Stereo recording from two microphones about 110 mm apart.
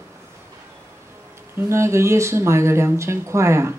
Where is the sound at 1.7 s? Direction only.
25° right (ahead or behind).